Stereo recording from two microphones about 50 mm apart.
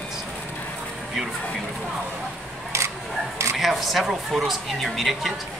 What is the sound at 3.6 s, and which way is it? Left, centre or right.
A woman's voice, centre.